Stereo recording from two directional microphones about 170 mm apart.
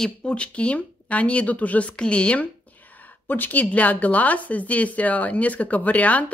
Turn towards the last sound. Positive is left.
turn(degrees=10)  # may be behind; listen again after turning